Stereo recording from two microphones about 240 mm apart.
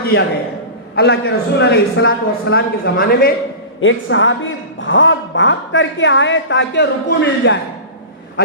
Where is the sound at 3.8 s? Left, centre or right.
Left.